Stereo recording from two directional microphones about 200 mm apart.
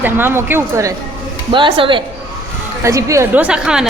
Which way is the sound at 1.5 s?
25° right (ahead or behind).